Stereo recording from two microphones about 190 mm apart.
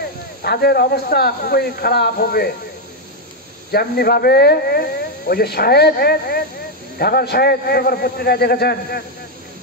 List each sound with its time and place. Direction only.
0.4 s speech: 55° left (ahead or behind)
3.7 s a man's voice: 55° left (ahead or behind)